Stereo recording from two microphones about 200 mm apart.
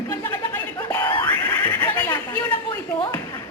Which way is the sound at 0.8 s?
10° left (ahead or behind).